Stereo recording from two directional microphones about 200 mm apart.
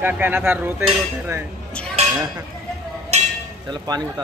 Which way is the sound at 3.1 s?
35° right (ahead or behind).